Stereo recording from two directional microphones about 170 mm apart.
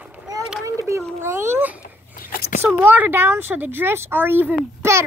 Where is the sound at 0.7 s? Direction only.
15° right (ahead or behind).